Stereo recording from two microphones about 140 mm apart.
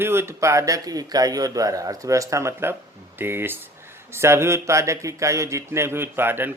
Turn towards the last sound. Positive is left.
turn(degrees=-15)  # may be behind; listen again after turning